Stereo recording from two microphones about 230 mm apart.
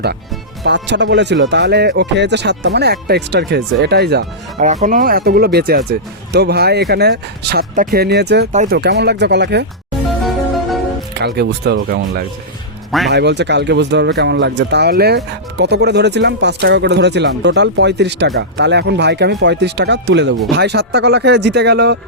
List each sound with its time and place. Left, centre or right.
0.6 s speech: right
4.6 s speech: right
11.1 s speech: right